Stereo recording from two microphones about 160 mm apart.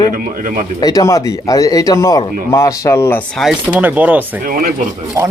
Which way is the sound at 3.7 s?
10° right (ahead or behind).